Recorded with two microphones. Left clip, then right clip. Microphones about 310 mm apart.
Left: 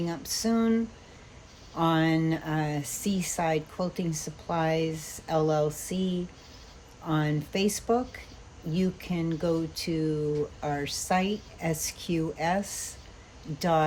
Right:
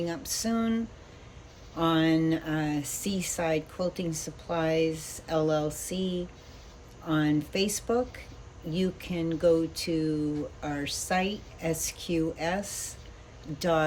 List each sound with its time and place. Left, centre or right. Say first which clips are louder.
0.0 s speech: left 1 dB; left
7.1 s speech: right 2 dB; left